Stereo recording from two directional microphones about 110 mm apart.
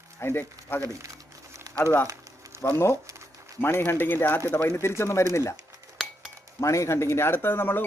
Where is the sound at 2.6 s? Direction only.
25° left (ahead or behind).